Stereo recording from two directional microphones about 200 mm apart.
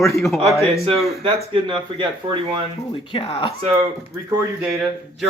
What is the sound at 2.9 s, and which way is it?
Speech, 25° left (ahead or behind).